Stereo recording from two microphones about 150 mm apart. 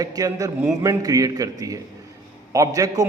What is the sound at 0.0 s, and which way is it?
A man's voice, 25° right (ahead or behind).